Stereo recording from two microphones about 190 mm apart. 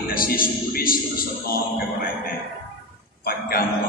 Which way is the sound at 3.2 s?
50° left (ahead or behind).